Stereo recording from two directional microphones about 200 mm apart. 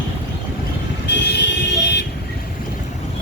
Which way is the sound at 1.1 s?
60° left (ahead or behind).